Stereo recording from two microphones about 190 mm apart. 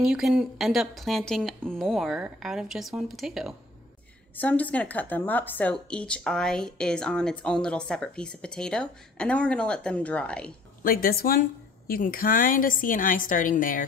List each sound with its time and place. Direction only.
0.0 s a woman's voice: centre (ahead or behind)
10.8 s a woman's voice: 50° left (ahead or behind)